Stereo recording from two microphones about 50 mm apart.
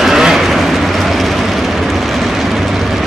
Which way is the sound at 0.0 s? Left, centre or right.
Centre.